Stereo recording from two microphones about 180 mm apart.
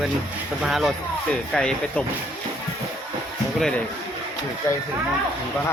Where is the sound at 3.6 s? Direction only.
5° left (ahead or behind).